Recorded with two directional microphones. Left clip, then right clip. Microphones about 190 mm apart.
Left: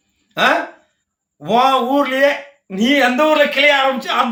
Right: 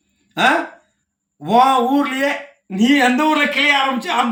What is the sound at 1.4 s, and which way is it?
Speech, 15° left (ahead or behind).